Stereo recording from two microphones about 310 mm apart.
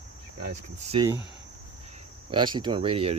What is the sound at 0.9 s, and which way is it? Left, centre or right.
Speech, centre.